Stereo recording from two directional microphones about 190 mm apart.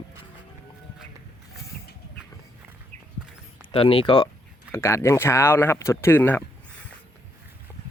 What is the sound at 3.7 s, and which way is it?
Speech, 30° left (ahead or behind).